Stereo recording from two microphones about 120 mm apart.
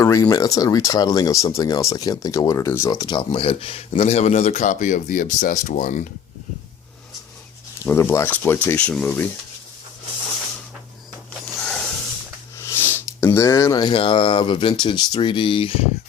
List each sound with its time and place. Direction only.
0.0 s speech: 30° left (ahead or behind)
3.0 s speech: 40° left (ahead or behind); by 6.1 s 90° left
7.9 s speech: 20° left (ahead or behind)
11.5 s a sound: 5° left (ahead or behind)
12.5 s speech: 20° left (ahead or behind); by 15.9 s 50° left (ahead or behind)